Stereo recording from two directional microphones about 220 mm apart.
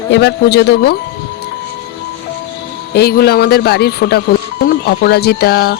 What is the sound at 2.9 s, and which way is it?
Speech, 45° left (ahead or behind).